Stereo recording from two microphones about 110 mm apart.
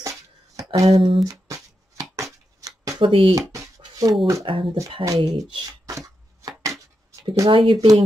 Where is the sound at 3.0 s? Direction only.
55° right (ahead or behind).